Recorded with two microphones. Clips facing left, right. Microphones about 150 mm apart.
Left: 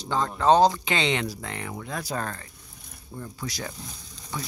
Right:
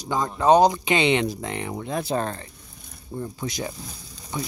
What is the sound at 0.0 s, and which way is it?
Speech, 15° right (ahead or behind).